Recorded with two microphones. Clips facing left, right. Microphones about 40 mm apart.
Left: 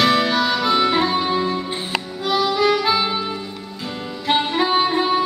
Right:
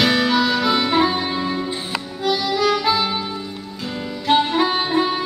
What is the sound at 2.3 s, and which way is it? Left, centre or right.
Harmonica, centre.